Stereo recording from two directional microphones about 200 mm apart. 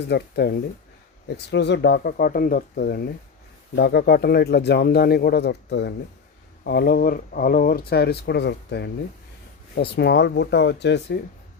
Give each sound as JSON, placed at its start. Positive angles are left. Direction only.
{"t": 0.1, "sound": "speech", "side_deg": 55}